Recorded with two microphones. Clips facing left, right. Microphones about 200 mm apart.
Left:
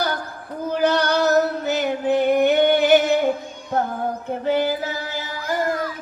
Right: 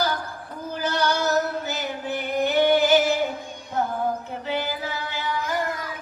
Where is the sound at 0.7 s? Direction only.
65° left (ahead or behind).